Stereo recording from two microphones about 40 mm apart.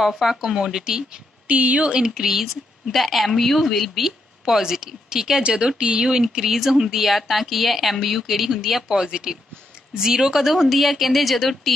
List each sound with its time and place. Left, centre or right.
0.0 s speech: centre
1.5 s speech: right
2.2 s a woman's voice: centre